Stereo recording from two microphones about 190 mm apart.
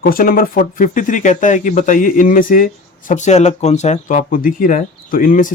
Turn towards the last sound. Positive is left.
turn(degrees=45)  # may be behind; listen again after turning